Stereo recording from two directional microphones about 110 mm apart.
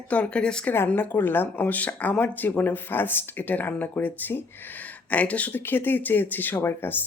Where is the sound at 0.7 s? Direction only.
20° left (ahead or behind).